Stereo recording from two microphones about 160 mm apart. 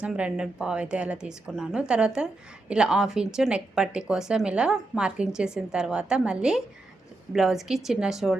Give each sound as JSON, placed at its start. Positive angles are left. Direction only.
{"t": 0.0, "sound": "speech", "side_deg": -5}